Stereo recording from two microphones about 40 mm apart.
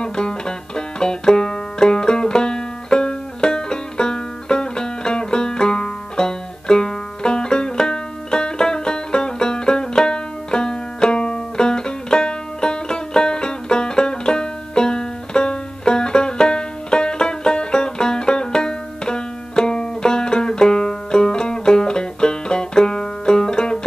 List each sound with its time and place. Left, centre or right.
0.0 s banjo: centre